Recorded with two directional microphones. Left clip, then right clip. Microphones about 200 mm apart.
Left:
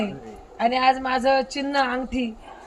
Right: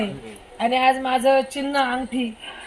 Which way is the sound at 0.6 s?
30° right (ahead or behind).